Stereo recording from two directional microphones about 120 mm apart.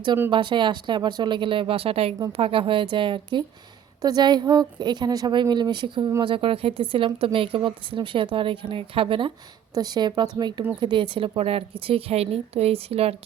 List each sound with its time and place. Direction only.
0.3 s a woman's voice: 45° right (ahead or behind)
6.2 s a woman's voice: 50° right (ahead or behind)
9.7 s a woman's voice: 35° right (ahead or behind); by 13.1 s 55° right (ahead or behind)